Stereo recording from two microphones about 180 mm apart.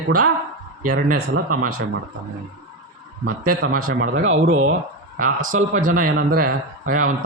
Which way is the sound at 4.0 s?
90° right.